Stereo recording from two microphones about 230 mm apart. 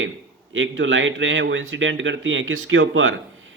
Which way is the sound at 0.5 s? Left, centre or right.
Right.